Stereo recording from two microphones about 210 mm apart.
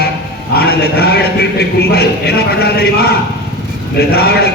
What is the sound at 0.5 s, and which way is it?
A man's voice, 50° left (ahead or behind).